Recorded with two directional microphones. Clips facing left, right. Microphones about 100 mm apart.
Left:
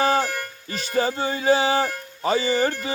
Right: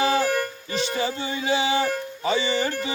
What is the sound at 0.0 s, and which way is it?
Music, 40° left (ahead or behind).